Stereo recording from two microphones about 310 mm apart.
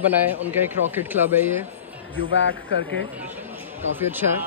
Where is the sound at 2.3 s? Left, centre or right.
Left.